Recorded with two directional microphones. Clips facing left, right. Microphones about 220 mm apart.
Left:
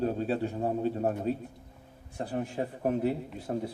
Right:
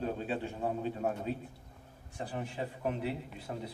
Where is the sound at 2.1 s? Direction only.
40° left (ahead or behind).